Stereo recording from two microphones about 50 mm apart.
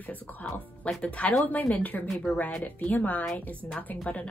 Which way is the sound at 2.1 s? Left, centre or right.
Centre.